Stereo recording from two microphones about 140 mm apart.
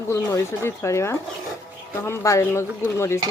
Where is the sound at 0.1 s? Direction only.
20° left (ahead or behind).